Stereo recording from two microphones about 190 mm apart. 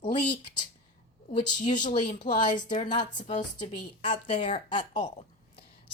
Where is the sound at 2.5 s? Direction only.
20° left (ahead or behind).